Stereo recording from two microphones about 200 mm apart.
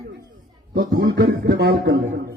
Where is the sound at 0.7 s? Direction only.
50° right (ahead or behind).